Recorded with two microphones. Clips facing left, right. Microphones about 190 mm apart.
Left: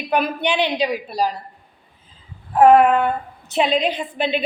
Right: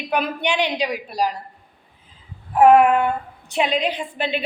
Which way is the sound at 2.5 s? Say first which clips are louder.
Left 1 dB; 10° right (ahead or behind).